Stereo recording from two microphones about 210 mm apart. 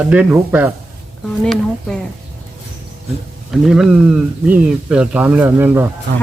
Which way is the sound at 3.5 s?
Centre (ahead or behind).